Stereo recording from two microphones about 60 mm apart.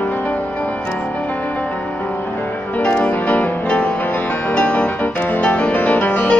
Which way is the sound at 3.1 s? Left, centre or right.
Left.